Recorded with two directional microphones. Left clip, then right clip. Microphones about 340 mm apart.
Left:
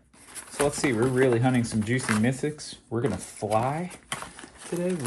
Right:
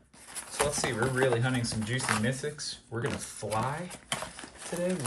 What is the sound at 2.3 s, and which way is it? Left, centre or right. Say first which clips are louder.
Speech: left 4 dB; centre.